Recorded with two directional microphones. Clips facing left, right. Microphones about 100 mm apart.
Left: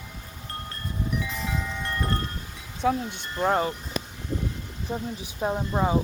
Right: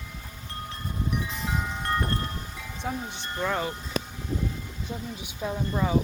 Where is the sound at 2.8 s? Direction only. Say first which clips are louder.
Left 8 dB; 75° left (ahead or behind).